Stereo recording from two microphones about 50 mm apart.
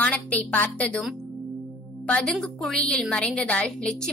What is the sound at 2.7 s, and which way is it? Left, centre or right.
Speech, left.